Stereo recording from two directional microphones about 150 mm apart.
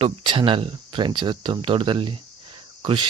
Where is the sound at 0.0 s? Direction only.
35° right (ahead or behind).